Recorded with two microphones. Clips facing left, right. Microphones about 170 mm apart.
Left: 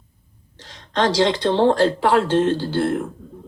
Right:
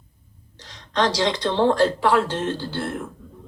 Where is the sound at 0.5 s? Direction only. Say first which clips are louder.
Left 1 dB; 30° left (ahead or behind).